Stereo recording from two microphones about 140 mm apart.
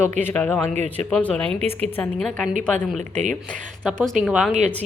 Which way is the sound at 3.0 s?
55° right (ahead or behind).